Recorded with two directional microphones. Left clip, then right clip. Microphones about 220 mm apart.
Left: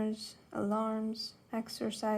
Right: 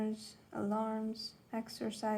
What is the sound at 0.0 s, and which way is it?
Speech, 45° left (ahead or behind).